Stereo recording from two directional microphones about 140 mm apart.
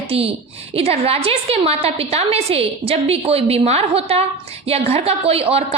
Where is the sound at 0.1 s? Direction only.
45° right (ahead or behind).